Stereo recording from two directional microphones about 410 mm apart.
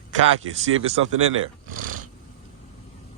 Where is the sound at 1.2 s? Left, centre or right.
Right.